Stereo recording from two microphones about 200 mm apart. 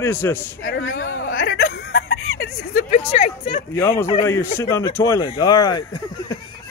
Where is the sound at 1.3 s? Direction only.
50° left (ahead or behind).